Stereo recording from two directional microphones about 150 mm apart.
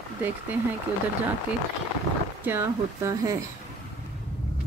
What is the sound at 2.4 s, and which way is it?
Speech, 15° right (ahead or behind).